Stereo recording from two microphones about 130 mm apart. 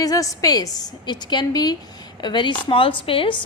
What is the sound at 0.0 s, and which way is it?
A woman's voice, 25° left (ahead or behind).